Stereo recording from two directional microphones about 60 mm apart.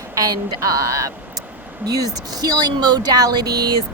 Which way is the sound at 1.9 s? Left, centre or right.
Right.